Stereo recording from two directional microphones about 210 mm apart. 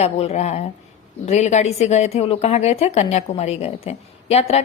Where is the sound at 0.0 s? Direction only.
30° left (ahead or behind).